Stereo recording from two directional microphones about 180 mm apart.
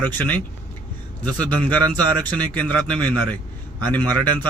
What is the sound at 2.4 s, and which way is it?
A man's voice, 10° left (ahead or behind).